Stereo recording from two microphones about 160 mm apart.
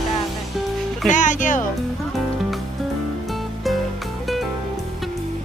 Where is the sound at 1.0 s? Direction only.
50° left (ahead or behind).